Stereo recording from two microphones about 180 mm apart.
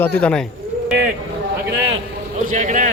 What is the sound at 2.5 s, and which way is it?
Speech, 45° right (ahead or behind).